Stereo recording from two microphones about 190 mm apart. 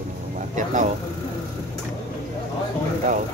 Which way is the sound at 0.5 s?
40° right (ahead or behind).